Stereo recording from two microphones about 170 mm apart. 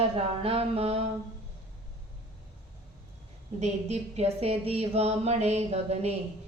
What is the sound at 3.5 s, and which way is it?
Mantra, 40° right (ahead or behind).